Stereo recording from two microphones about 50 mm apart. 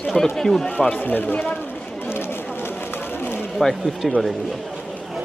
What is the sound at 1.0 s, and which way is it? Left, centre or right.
Speech, left.